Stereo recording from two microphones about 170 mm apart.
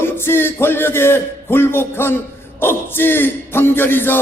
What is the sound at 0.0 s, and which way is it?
A man's voice, 15° left (ahead or behind).